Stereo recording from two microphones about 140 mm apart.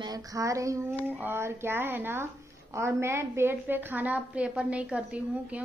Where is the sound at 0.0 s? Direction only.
25° right (ahead or behind).